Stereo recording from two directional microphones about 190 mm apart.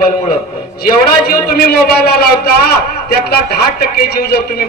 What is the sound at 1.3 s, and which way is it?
A man's voice, 55° left (ahead or behind).